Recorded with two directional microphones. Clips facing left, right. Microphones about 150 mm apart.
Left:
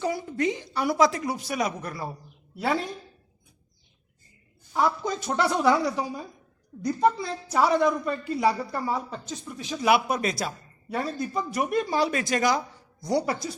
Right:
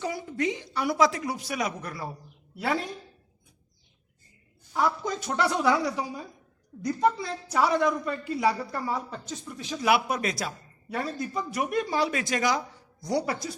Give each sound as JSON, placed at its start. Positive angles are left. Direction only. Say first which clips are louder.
{"t": 0.0, "sound": "speech", "louder": "left 3 dB", "side_deg": 40}
{"t": 4.7, "sound": "a woman's voice", "louder": "left 2 dB", "side_deg": 25}
{"t": 9.9, "sound": "speech", "louder": "left 2 dB", "side_deg": 30}
{"t": 13.1, "sound": "a woman's voice", "louder": "left 2 dB", "side_deg": 25}